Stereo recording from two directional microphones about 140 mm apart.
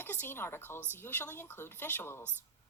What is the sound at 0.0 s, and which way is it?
A woman's voice, 15° left (ahead or behind).